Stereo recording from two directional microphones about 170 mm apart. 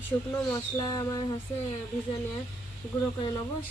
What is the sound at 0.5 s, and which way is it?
Speech, 25° left (ahead or behind).